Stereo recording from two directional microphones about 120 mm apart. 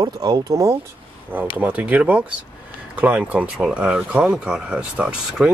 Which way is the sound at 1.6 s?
15° right (ahead or behind).